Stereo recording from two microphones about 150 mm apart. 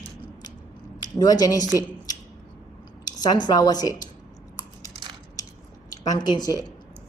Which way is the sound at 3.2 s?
30° left (ahead or behind).